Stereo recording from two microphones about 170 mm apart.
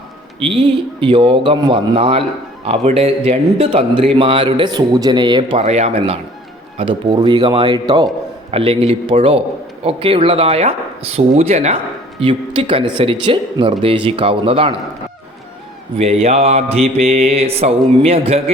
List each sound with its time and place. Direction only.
0.3 s a man's voice: 35° right (ahead or behind)
6.7 s a man's voice: 25° right (ahead or behind)
16.0 s a man's voice: 35° right (ahead or behind)